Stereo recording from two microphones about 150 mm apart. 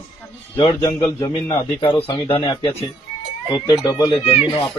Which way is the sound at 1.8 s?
35° left (ahead or behind).